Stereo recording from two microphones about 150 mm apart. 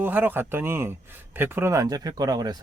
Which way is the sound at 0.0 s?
10° right (ahead or behind).